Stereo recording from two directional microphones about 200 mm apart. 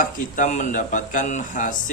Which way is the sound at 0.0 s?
40° left (ahead or behind).